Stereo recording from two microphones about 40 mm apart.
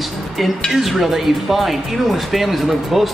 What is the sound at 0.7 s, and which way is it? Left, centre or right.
Speech, centre.